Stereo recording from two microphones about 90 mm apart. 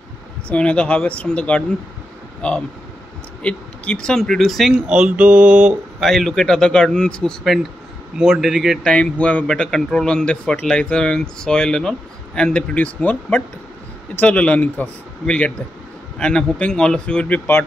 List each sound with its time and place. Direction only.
0.5 s a man's voice: 10° left (ahead or behind); by 5.8 s 10° right (ahead or behind)
5.9 s a man's voice: centre (ahead or behind)
8.2 s speech: 5° right (ahead or behind)
8.9 s a man's voice: 10° left (ahead or behind)